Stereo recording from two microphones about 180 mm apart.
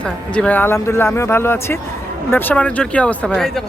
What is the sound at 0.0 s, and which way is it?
Speech, 5° left (ahead or behind).